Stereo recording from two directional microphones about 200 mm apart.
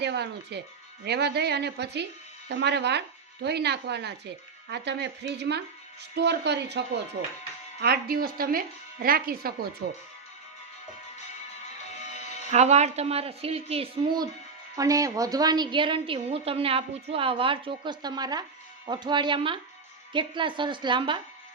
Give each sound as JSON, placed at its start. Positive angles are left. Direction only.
{"t": 0.0, "sound": "speech", "side_deg": -55}
{"t": 12.5, "sound": "a woman's voice", "side_deg": -35}